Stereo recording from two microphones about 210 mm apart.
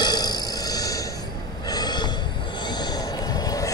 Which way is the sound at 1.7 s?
20° left (ahead or behind).